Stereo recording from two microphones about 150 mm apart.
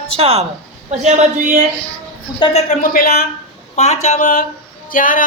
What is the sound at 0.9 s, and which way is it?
Speech, 55° right (ahead or behind).